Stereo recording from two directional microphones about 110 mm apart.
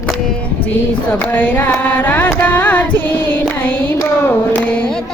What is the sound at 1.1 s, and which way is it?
Carnatic music, 15° left (ahead or behind).